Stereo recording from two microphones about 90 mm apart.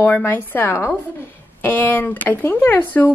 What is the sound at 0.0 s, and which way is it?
A woman's voice, 25° left (ahead or behind).